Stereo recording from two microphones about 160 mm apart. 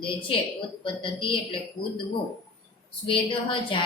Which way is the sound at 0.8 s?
30° left (ahead or behind).